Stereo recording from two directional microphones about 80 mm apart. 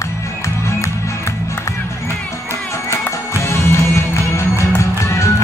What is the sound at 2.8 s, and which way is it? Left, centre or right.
Music, left.